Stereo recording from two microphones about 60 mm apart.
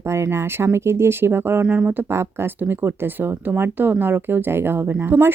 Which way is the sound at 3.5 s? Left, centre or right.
Right.